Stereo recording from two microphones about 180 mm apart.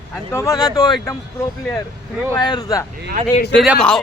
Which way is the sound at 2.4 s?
20° left (ahead or behind).